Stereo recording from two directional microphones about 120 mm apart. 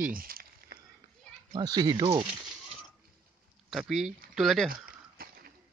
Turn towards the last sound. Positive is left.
turn(degrees=0)  # may be behind; listen again after turning